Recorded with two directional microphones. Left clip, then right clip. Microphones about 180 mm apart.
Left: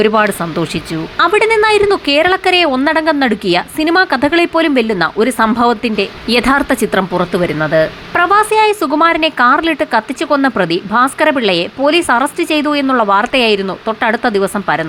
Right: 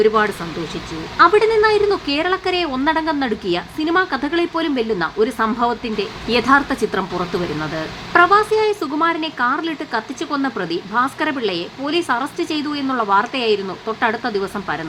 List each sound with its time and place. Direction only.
1.2 s a woman's voice: 30° left (ahead or behind)